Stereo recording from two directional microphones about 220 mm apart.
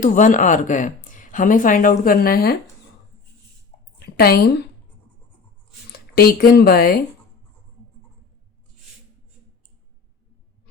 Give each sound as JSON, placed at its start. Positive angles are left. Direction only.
{"t": 0.0, "sound": "speech", "side_deg": 35}
{"t": 4.0, "sound": "a woman's voice", "side_deg": 45}
{"t": 5.9, "sound": "speech", "side_deg": 45}